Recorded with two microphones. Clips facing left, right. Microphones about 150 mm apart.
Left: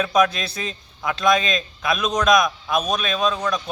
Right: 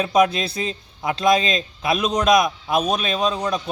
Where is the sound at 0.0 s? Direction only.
25° right (ahead or behind).